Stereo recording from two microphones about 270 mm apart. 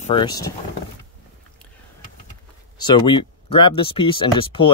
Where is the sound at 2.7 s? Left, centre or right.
Centre.